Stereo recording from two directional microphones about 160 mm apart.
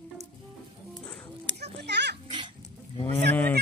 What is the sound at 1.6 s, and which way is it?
Children playing, 90° right.